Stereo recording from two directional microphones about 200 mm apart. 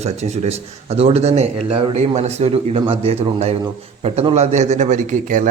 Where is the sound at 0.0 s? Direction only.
35° right (ahead or behind).